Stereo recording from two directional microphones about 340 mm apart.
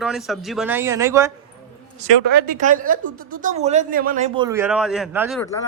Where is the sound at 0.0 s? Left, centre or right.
Centre.